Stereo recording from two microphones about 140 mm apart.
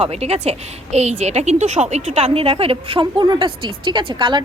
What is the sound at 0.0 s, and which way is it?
A woman's voice, 45° right (ahead or behind).